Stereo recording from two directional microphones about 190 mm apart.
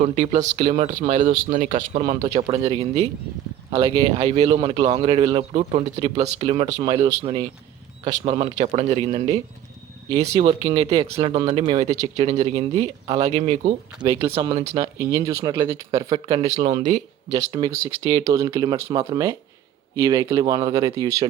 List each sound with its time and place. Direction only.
0.0 s a man's voice: 35° right (ahead or behind)
14.1 s speech: 15° right (ahead or behind)
16.5 s a man's voice: 40° right (ahead or behind)
17.4 s speech: 15° right (ahead or behind)